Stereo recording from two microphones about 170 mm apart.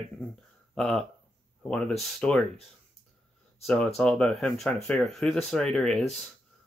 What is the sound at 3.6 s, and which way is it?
Speech, 5° left (ahead or behind).